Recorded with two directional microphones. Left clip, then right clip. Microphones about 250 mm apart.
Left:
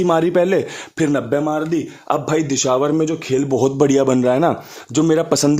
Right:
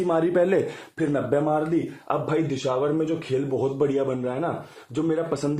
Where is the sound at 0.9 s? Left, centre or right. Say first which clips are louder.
Left 6 dB; left.